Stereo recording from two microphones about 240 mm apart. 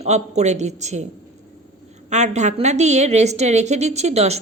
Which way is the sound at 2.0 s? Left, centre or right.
Right.